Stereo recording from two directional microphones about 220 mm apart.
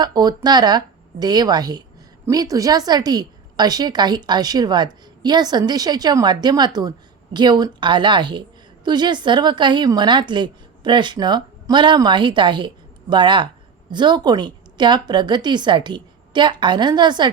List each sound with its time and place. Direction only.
0.0 s a woman's voice: 20° right (ahead or behind)